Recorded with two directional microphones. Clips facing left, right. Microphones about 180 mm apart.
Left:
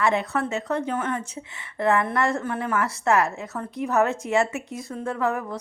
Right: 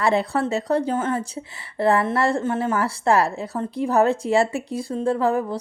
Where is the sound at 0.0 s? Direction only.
35° right (ahead or behind).